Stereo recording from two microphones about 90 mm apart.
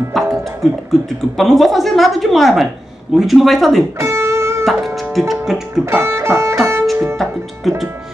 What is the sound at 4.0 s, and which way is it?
Music, 30° right (ahead or behind).